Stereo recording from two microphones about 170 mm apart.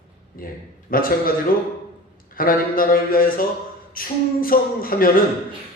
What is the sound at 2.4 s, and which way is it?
A man's voice, 55° left (ahead or behind).